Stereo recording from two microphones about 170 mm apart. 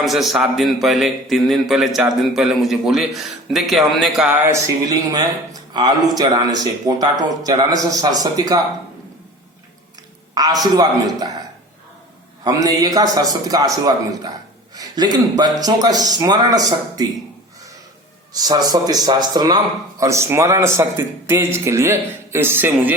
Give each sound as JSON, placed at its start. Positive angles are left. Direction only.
{"t": 0.0, "sound": "a man's voice", "side_deg": 0}
{"t": 4.3, "sound": "a man's voice", "side_deg": -10}
{"t": 10.3, "sound": "a man's voice", "side_deg": -20}
{"t": 12.5, "sound": "a man's voice", "side_deg": -20}
{"t": 14.8, "sound": "a man's voice", "side_deg": -25}
{"t": 18.3, "sound": "a man's voice", "side_deg": -20}